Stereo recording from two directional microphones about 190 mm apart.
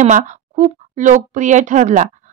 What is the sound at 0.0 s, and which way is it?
Speech, 40° right (ahead or behind).